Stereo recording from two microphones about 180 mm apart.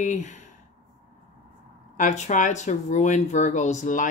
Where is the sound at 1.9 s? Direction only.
40° left (ahead or behind).